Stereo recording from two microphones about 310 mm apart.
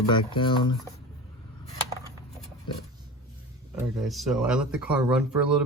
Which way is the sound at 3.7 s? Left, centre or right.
Centre.